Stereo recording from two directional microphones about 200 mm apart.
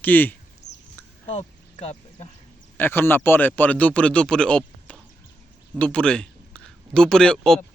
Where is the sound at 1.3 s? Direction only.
35° left (ahead or behind).